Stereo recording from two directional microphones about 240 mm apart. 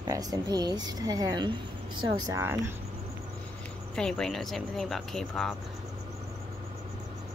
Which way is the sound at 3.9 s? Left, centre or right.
Centre.